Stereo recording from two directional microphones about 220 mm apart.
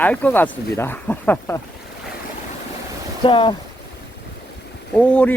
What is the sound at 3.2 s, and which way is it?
Speech, 20° left (ahead or behind).